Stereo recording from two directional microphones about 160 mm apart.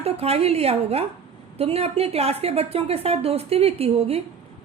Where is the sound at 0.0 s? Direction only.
40° right (ahead or behind).